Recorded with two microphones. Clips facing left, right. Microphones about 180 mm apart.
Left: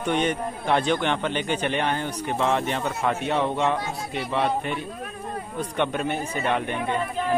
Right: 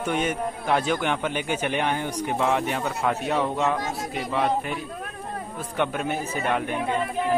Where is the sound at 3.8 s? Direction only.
45° right (ahead or behind).